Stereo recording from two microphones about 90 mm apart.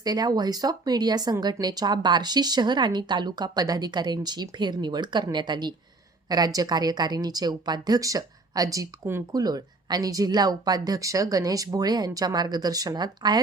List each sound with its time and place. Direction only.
0.0 s a woman's voice: 45° right (ahead or behind)